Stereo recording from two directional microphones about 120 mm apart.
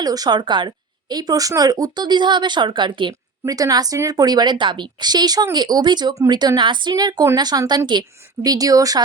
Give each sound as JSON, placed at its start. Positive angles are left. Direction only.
{"t": 0.0, "sound": "speech", "side_deg": -30}
{"t": 3.4, "sound": "speech", "side_deg": -30}